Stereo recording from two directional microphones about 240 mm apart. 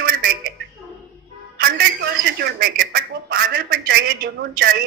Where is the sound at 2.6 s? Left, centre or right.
Right.